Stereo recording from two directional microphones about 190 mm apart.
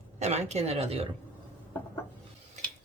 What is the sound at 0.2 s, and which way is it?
Speech, 35° right (ahead or behind).